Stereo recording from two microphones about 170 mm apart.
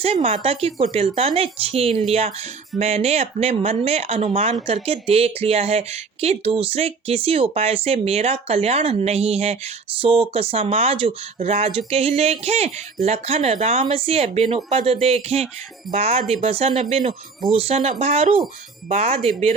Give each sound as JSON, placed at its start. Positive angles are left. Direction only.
{"t": 0.0, "sound": "speech", "side_deg": -35}